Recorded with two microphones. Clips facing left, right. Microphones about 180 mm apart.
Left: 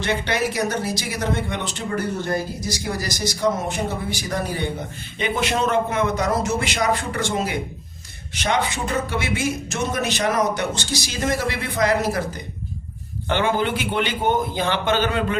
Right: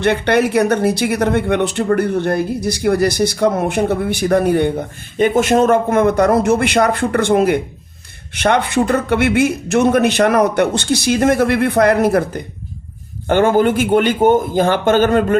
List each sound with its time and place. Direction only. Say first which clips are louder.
0.0 s a man's voice: right 9 dB; 60° right (ahead or behind)